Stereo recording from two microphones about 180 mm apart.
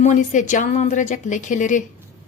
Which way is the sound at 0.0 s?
45° left (ahead or behind).